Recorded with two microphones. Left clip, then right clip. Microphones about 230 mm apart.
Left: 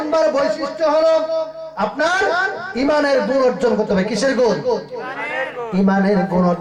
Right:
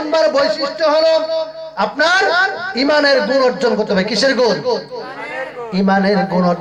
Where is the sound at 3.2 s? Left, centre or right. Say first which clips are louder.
Right 2 dB; right.